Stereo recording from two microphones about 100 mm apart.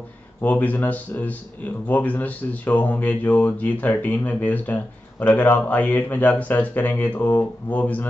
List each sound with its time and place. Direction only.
0.4 s speech: 15° left (ahead or behind)